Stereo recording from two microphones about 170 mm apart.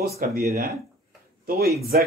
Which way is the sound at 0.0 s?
65° right (ahead or behind).